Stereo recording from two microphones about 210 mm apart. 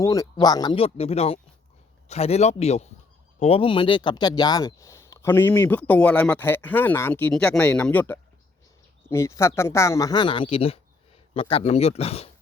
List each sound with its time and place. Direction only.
0.0 s a man's voice: 15° left (ahead or behind)